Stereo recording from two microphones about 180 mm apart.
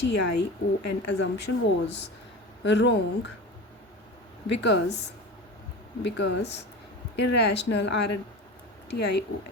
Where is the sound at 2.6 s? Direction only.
75° left (ahead or behind).